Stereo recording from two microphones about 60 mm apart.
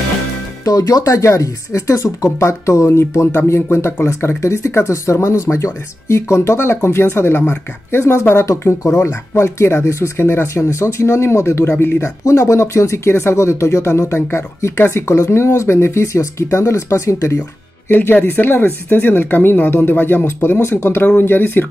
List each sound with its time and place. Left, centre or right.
0.7 s speech: left
1.2 s speech: left
8.5 s speech: left
10.1 s speech: left
17.8 s speech: left